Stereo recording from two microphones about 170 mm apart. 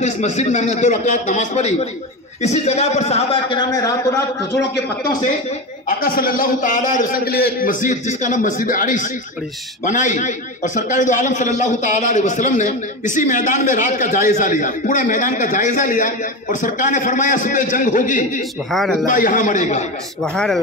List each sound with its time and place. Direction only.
0.0 s a man's voice: 40° left (ahead or behind); by 4.6 s 20° left (ahead or behind)
5.9 s a man's voice: 60° left (ahead or behind)
18.7 s speech: centre (ahead or behind)
19.0 s a man's voice: 50° left (ahead or behind)
20.3 s speech: centre (ahead or behind)